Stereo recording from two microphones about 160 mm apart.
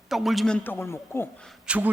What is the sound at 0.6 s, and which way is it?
Speech, 15° left (ahead or behind).